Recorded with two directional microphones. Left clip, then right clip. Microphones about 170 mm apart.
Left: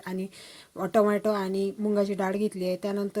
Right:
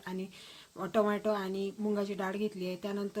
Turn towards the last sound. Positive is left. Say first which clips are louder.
# left 8 dB
turn(degrees=35)  # may be behind; listen again after turning